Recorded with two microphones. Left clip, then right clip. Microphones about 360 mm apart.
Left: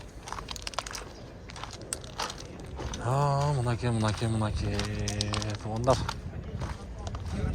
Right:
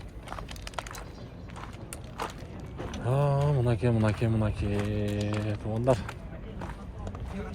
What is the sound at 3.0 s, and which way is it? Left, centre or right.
Speech, centre.